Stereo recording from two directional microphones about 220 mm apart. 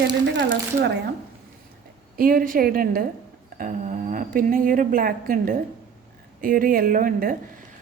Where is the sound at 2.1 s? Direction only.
40° right (ahead or behind).